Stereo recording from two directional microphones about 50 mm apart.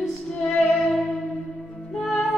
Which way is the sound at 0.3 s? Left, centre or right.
Centre.